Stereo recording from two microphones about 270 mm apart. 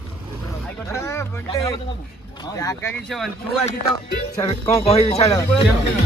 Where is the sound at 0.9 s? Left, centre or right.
Centre.